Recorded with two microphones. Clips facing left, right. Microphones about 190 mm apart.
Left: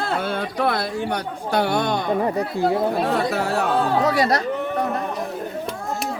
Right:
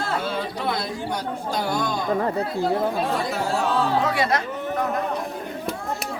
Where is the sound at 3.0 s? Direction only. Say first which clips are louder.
Left 3 dB; 65° left (ahead or behind).